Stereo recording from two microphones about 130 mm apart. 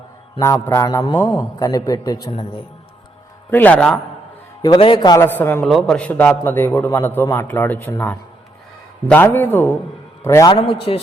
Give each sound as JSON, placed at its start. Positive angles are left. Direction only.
{"t": 0.3, "sound": "a man's voice", "side_deg": 20}
{"t": 2.3, "sound": "a man's voice", "side_deg": 40}
{"t": 3.5, "sound": "a man's voice", "side_deg": 10}
{"t": 4.8, "sound": "a man's voice", "side_deg": 35}
{"t": 5.2, "sound": "a man's voice", "side_deg": 15}
{"t": 5.6, "sound": "a man's voice", "side_deg": 5}
{"t": 10.6, "sound": "a man's voice", "side_deg": 45}